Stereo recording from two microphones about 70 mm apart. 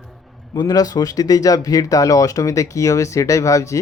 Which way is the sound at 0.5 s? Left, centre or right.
Left.